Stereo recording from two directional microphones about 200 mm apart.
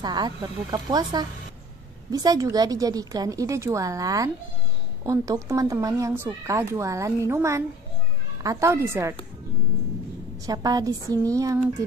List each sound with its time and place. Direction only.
0.0 s speech: 20° right (ahead or behind)
10.4 s speech: 20° right (ahead or behind)